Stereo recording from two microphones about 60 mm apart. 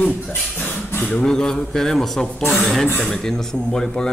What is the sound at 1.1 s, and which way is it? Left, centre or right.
A man's voice, centre.